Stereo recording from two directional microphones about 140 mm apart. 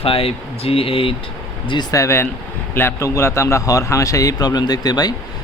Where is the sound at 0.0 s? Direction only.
45° left (ahead or behind).